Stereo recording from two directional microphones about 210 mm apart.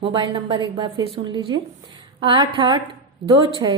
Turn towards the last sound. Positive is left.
turn(degrees=-20)  # may be behind; listen again after turning